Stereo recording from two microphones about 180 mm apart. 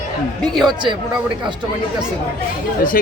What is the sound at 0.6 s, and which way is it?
Speech, 25° right (ahead or behind).